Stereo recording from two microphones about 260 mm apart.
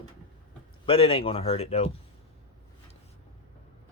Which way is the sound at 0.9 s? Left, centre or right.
Left.